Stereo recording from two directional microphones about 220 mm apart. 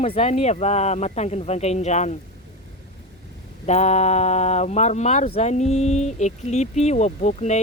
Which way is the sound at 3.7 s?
30° left (ahead or behind).